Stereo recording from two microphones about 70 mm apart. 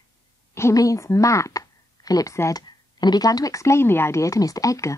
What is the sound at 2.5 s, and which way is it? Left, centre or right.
Speech, left.